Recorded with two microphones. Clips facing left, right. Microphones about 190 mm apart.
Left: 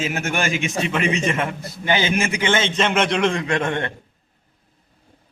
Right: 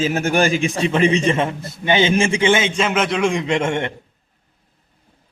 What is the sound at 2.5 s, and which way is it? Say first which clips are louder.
Speech: right 3 dB; 15° right (ahead or behind).